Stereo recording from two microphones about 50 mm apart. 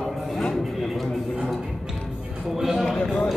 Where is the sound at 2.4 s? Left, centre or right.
Centre.